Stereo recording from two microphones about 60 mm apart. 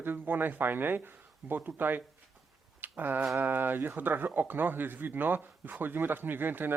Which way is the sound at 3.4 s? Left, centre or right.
Right.